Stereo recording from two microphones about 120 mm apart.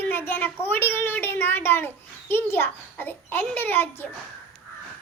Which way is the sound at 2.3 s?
20° left (ahead or behind).